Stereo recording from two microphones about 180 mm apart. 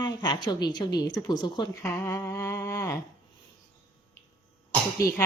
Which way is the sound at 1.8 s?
15° left (ahead or behind).